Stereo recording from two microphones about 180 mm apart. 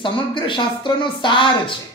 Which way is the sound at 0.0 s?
25° left (ahead or behind).